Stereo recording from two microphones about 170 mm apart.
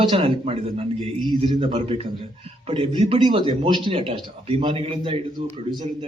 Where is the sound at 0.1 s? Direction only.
35° right (ahead or behind).